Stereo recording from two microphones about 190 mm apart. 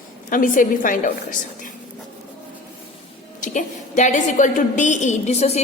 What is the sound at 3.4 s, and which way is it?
A woman's voice, 40° left (ahead or behind).